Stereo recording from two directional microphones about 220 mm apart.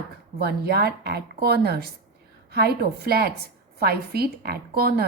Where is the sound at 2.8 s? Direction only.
45° right (ahead or behind).